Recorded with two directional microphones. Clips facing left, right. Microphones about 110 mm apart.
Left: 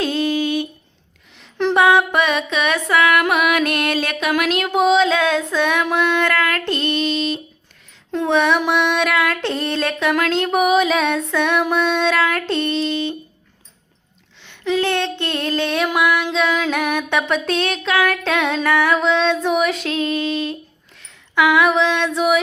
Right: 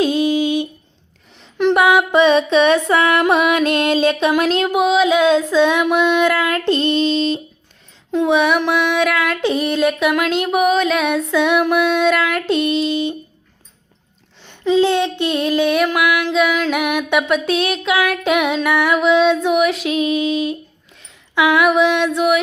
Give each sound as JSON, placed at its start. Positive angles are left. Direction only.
{"t": 0.0, "sound": "a sound", "side_deg": -15}
{"t": 1.5, "sound": "music", "side_deg": -5}
{"t": 2.1, "sound": "music", "side_deg": -25}
{"t": 4.7, "sound": "female singing", "side_deg": -5}
{"t": 5.1, "sound": "music", "side_deg": -15}
{"t": 8.1, "sound": "music", "side_deg": -10}
{"t": 10.5, "sound": "female singing", "side_deg": 5}
{"t": 11.7, "sound": "music", "side_deg": -10}
{"t": 14.6, "sound": "music", "side_deg": -20}
{"t": 19.9, "sound": "music", "side_deg": -15}
{"t": 21.0, "sound": "a sound", "side_deg": -15}
{"t": 22.1, "sound": "female singing", "side_deg": 0}